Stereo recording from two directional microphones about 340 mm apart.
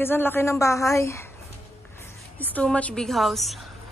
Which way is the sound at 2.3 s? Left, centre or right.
Centre.